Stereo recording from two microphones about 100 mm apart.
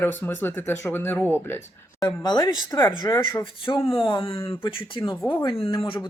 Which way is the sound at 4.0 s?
55° left (ahead or behind).